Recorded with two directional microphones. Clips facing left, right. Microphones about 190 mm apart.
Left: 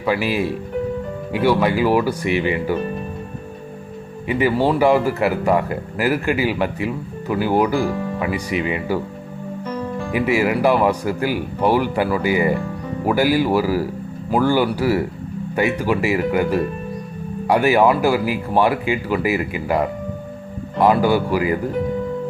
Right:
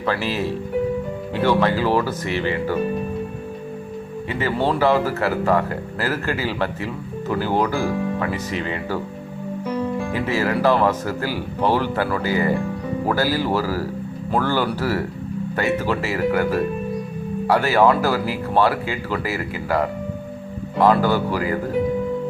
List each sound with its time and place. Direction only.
0.0 s speech: 10° left (ahead or behind)
4.3 s speech: 15° left (ahead or behind)
9.6 s music: 10° right (ahead or behind)
10.1 s speech: 15° left (ahead or behind)